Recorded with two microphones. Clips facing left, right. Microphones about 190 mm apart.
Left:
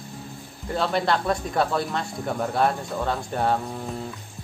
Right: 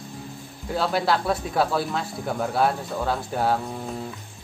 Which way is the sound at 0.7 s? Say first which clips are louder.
Even; centre (ahead or behind).